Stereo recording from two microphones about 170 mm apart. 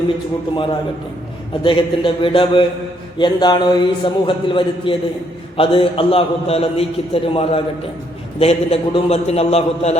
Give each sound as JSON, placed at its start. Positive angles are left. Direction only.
{"t": 1.6, "sound": "a man's voice", "side_deg": 30}